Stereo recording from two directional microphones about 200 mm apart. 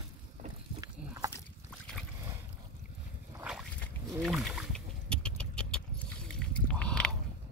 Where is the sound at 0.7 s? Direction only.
15° right (ahead or behind).